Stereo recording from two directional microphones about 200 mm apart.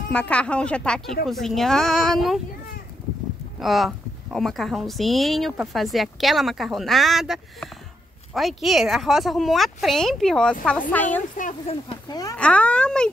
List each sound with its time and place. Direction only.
0.1 s a woman's voice: 5° left (ahead or behind)
3.5 s a woman's voice: centre (ahead or behind)
11.3 s speech: 40° left (ahead or behind)
12.1 s speech: 20° left (ahead or behind)
12.4 s a woman's voice: 5° left (ahead or behind)